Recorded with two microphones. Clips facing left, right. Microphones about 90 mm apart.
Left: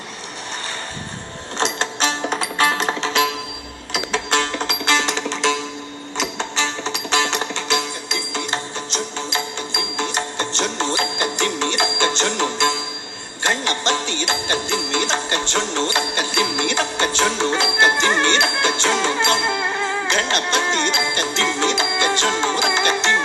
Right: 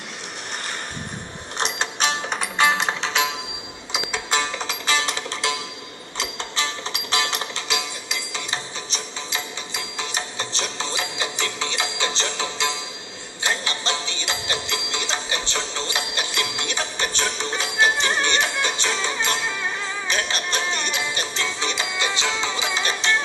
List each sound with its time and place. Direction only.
1.8 s music: 5° right (ahead or behind)
3.9 s music: 65° left (ahead or behind)
9.3 s music: 70° left (ahead or behind)